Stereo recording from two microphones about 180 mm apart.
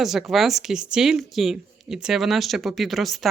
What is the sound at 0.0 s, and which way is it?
Speech, centre (ahead or behind).